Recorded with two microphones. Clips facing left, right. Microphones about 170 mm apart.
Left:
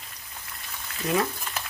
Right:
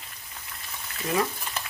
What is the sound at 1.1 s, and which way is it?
Frying, 5° left (ahead or behind).